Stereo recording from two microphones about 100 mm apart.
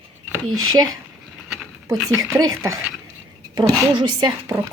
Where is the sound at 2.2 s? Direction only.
30° right (ahead or behind).